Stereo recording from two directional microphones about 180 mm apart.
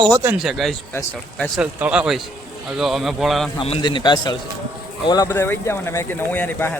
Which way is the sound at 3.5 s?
30° left (ahead or behind).